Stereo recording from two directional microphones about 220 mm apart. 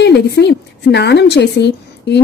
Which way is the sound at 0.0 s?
50° left (ahead or behind).